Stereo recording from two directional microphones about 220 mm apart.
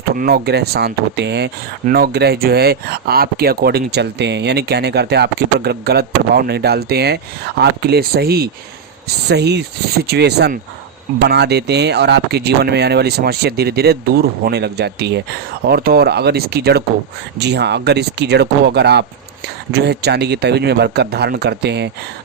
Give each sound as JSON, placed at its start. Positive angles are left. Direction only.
{"t": 0.2, "sound": "speech", "side_deg": -45}